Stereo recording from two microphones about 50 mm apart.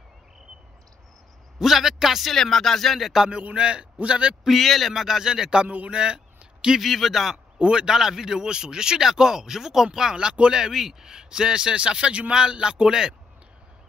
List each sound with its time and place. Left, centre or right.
1.6 s speech: centre
2.3 s speech: centre
3.3 s a man's voice: right
4.5 s a man's voice: centre
5.7 s a man's voice: right
6.8 s speech: centre
7.5 s a man's voice: centre
10.6 s a man's voice: centre